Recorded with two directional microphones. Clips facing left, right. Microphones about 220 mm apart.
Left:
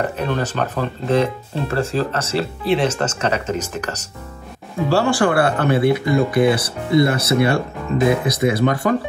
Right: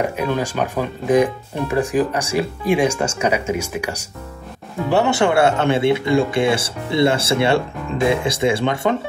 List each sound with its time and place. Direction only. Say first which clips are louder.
0.0 s speech: right 1 dB; 10° right (ahead or behind)